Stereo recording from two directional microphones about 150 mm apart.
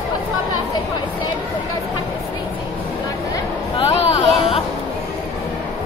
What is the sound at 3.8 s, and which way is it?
Speech, 40° left (ahead or behind).